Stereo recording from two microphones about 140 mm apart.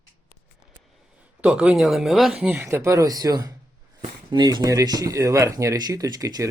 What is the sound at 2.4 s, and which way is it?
Speech, 15° right (ahead or behind).